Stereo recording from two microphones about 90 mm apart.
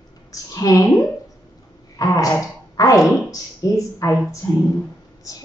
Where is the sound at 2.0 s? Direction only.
40° left (ahead or behind).